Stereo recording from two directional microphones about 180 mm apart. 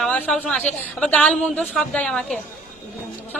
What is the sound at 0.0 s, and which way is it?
A woman's voice, 5° left (ahead or behind).